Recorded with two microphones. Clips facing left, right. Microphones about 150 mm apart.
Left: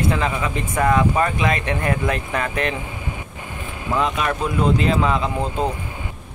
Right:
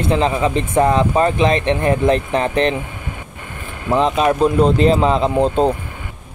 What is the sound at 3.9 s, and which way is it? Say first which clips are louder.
Speech: right 6 dB; 30° right (ahead or behind).